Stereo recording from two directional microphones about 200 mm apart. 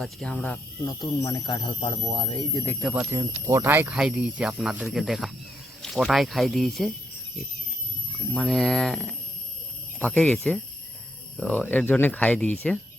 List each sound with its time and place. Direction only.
0.0 s speech: centre (ahead or behind)
1.2 s speech: 20° left (ahead or behind)
2.9 s speech: 10° right (ahead or behind)
8.3 s speech: centre (ahead or behind)